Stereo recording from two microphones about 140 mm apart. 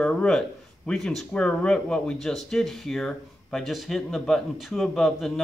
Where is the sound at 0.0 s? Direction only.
10° left (ahead or behind).